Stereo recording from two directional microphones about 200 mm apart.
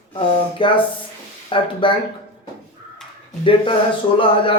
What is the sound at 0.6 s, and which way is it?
Speech, 25° left (ahead or behind).